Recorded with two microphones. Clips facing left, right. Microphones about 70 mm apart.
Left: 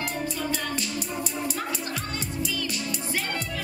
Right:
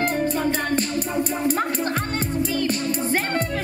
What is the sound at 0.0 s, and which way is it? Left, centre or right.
Music, right.